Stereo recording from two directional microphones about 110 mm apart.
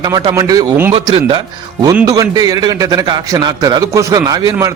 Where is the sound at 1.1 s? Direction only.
50° right (ahead or behind).